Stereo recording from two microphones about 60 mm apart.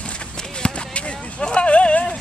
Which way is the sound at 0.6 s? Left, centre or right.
Centre.